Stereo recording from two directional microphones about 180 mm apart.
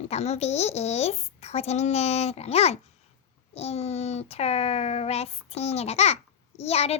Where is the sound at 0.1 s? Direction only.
35° left (ahead or behind).